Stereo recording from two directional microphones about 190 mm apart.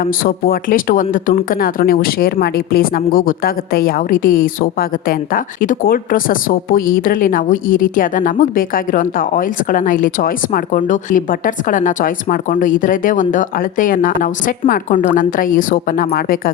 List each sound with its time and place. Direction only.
0.0 s speech: 50° left (ahead or behind)